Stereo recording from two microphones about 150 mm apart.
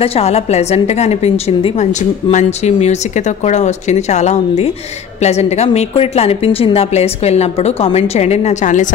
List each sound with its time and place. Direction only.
0.0 s a woman's voice: 45° left (ahead or behind)